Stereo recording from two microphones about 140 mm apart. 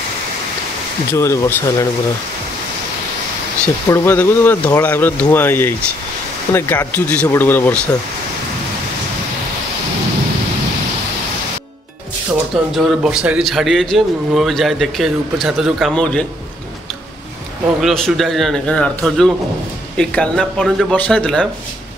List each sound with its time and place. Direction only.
1.1 s speech: 20° left (ahead or behind)
3.6 s speech: 15° left (ahead or behind)
12.7 s a man's voice: 5° right (ahead or behind)
17.8 s a man's voice: centre (ahead or behind)